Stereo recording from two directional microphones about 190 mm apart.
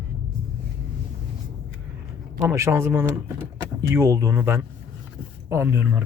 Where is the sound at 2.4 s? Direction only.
15° right (ahead or behind).